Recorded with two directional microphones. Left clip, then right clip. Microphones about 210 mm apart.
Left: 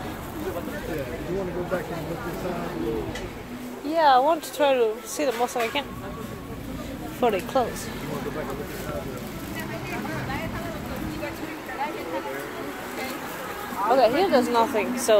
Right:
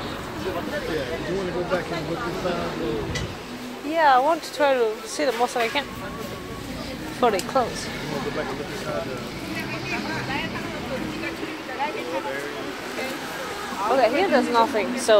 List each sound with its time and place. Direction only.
3.9 s speech: 15° left (ahead or behind)
7.2 s speech: 10° left (ahead or behind)
13.8 s speech: 15° left (ahead or behind)